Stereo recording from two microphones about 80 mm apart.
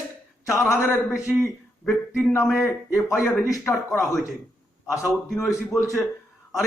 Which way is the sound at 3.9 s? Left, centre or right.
Left.